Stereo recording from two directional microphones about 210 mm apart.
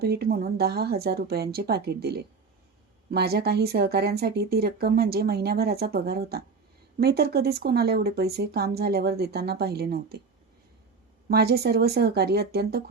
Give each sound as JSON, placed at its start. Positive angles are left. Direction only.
{"t": 0.0, "sound": "speech", "side_deg": -50}
{"t": 11.3, "sound": "speech", "side_deg": -50}